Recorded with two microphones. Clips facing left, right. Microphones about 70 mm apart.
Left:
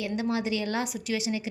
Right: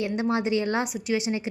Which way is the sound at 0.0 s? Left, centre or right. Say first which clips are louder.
Right 3 dB; right.